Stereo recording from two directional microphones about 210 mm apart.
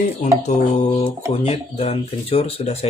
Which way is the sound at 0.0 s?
35° left (ahead or behind).